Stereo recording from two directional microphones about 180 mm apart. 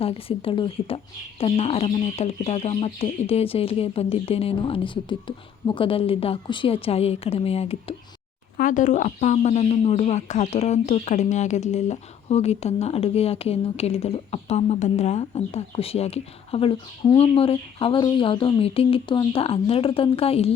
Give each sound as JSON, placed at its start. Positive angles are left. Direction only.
{"t": 0.0, "sound": "speech", "side_deg": 30}
{"t": 8.5, "sound": "speech", "side_deg": 45}